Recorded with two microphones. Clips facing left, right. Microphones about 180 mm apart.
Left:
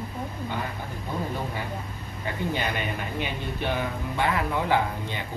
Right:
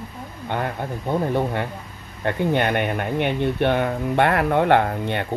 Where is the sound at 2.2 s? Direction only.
60° right (ahead or behind).